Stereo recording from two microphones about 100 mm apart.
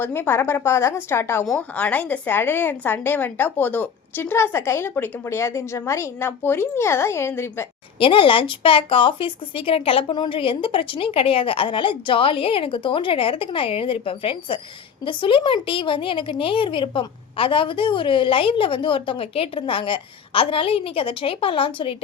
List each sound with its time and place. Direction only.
0.0 s a woman's voice: 20° left (ahead or behind)
7.9 s a woman's voice: 60° left (ahead or behind)